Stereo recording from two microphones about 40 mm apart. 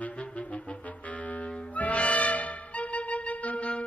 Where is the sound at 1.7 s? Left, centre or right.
Left.